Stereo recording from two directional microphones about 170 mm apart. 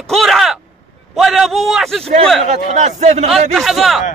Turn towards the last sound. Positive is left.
turn(degrees=0)  # may be behind; listen again after turning